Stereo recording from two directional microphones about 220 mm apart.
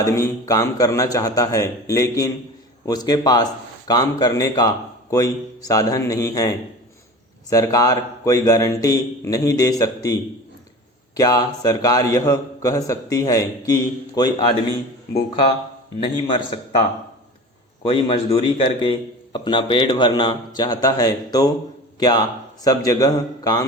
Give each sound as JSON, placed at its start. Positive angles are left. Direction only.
{"t": 0.0, "sound": "a man's voice", "side_deg": 15}
{"t": 7.5, "sound": "a man's voice", "side_deg": 15}
{"t": 11.2, "sound": "a man's voice", "side_deg": 15}
{"t": 17.8, "sound": "a man's voice", "side_deg": 25}